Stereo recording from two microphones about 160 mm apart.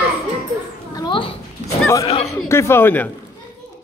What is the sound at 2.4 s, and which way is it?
Speech, 15° left (ahead or behind).